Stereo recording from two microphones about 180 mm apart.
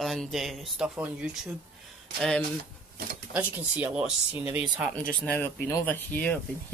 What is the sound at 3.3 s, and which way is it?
Speech, 10° right (ahead or behind).